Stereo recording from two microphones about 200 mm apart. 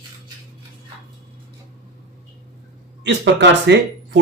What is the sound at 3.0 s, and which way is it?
Speech, 60° right (ahead or behind).